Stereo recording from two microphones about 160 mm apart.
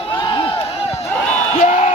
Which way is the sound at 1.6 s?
45° left (ahead or behind).